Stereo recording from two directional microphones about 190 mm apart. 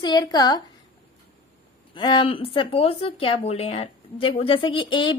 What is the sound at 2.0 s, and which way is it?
Speech, 25° left (ahead or behind).